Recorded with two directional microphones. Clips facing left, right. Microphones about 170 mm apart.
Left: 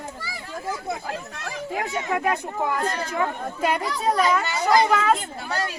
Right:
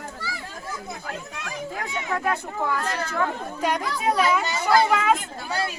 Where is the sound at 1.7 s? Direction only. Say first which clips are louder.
Left 4 dB; 20° left (ahead or behind).